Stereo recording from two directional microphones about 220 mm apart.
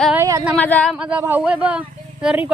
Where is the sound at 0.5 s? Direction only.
5° left (ahead or behind).